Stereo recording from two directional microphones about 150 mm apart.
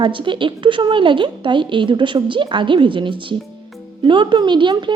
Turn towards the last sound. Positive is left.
turn(degrees=-30)  # may be behind; listen again after turning